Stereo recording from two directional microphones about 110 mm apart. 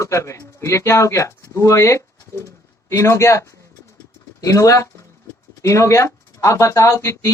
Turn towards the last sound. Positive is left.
turn(degrees=25)  # may be behind; listen again after turning